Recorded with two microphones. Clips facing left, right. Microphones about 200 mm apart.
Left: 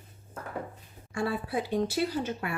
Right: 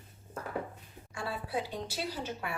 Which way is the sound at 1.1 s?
50° left (ahead or behind).